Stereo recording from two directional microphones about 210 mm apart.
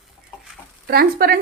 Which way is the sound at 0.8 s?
45° right (ahead or behind).